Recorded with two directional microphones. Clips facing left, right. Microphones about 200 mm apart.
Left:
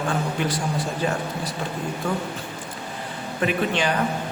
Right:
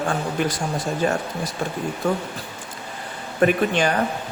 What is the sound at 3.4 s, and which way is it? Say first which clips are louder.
Speech: right 4 dB; 45° right (ahead or behind).